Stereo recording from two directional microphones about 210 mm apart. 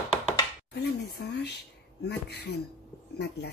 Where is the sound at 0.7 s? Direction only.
50° left (ahead or behind).